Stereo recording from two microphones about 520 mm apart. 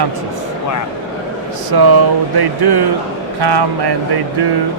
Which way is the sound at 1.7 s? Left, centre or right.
Right.